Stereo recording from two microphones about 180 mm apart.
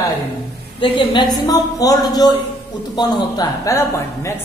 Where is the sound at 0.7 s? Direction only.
30° left (ahead or behind).